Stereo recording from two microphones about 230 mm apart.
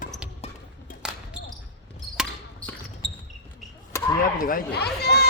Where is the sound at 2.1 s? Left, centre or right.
Centre.